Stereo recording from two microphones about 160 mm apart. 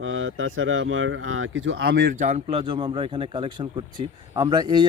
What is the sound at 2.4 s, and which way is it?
Speech, 35° right (ahead or behind).